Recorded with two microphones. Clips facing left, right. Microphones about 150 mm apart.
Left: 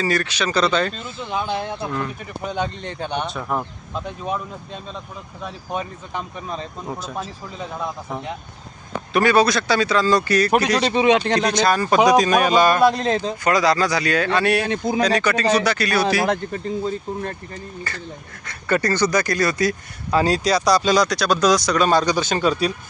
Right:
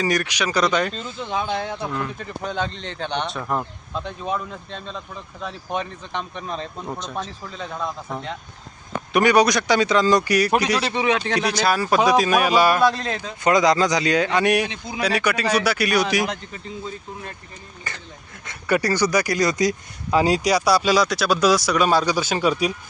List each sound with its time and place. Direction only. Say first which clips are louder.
0.0 s speech: left 1 dB; 15° right (ahead or behind)
1.4 s speech: left 1 dB; centre (ahead or behind)
9.1 s speech: even; 15° right (ahead or behind)
10.9 s speech: left 8 dB; 20° left (ahead or behind)
11.3 s speech: left 2 dB; 10° right (ahead or behind)
12.8 s speech: left 3 dB; 20° left (ahead or behind)
13.4 s speech: right 3 dB; 20° right (ahead or behind)
14.7 s speech: left 10 dB; 45° left (ahead or behind)
15.0 s speech: even; 10° right (ahead or behind)
16.2 s speech: left 6 dB; 50° left (ahead or behind)
17.9 s speech: left 4 dB; 15° right (ahead or behind)